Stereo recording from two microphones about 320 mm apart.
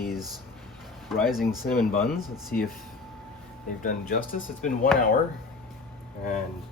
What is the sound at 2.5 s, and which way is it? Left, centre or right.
Speech, left.